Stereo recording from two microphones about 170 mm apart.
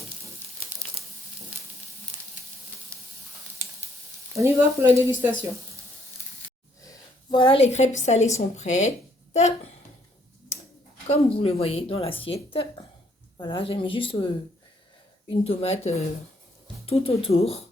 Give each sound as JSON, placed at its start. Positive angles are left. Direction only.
{"t": 4.4, "sound": "speech", "side_deg": -15}
{"t": 6.8, "sound": "a woman's voice", "side_deg": 25}
{"t": 11.0, "sound": "speech", "side_deg": 35}
{"t": 15.3, "sound": "speech", "side_deg": 35}